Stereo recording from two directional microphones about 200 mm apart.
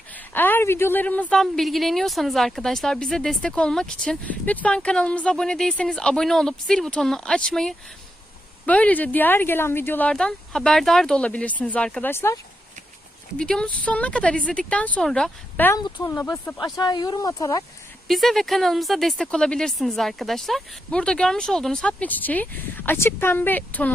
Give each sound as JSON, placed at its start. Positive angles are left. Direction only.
{"t": 0.3, "sound": "speech", "side_deg": 10}
{"t": 18.1, "sound": "speech", "side_deg": 0}